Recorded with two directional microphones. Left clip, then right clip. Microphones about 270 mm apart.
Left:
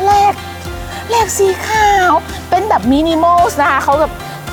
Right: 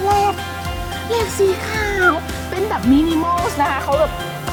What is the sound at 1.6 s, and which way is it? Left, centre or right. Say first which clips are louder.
Speech: left 8 dB; left.